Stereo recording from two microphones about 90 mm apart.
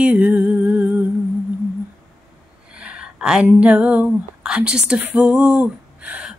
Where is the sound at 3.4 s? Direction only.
15° right (ahead or behind).